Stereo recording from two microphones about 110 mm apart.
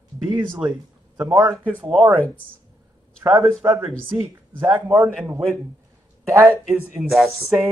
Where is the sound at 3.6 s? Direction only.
20° right (ahead or behind).